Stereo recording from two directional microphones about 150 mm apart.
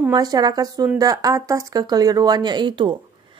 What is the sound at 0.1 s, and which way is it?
A woman's voice, 25° right (ahead or behind).